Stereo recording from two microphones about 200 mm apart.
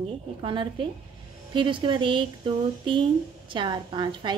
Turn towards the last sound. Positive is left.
turn(degrees=-20)  # may be behind; listen again after turning